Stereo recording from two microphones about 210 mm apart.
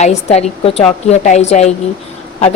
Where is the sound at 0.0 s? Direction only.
30° left (ahead or behind).